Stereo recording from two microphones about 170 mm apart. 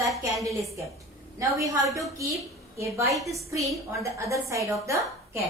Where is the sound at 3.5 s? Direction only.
15° right (ahead or behind).